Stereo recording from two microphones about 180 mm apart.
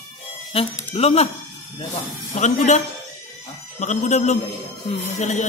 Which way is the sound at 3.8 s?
40° left (ahead or behind).